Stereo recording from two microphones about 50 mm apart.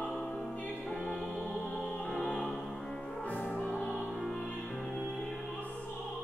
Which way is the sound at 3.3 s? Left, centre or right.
Left.